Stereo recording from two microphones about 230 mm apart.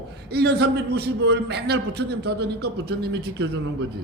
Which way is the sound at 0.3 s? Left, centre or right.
Right.